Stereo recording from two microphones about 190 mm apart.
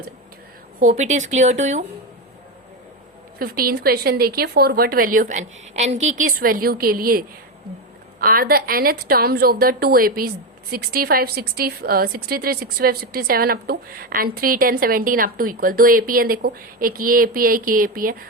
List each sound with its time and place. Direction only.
0.8 s speech: 40° right (ahead or behind)
3.3 s a woman's voice: 50° right (ahead or behind)